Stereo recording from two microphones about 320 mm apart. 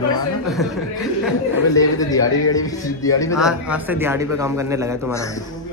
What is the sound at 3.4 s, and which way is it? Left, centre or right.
A man's voice, centre.